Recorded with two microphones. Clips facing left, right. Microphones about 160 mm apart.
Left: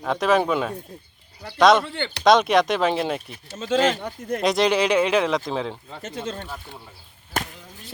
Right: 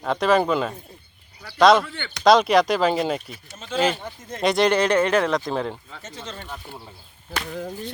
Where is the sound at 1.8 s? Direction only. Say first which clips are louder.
Left 6 dB; 30° left (ahead or behind).